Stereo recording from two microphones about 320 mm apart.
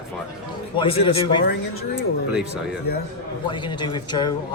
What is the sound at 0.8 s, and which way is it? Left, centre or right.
Speech, centre.